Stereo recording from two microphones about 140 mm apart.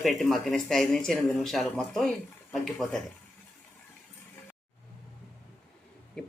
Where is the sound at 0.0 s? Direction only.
Centre (ahead or behind).